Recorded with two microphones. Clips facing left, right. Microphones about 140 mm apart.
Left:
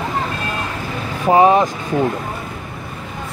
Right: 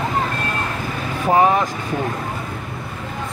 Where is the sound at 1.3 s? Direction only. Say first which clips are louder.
Left 4 dB; 20° left (ahead or behind).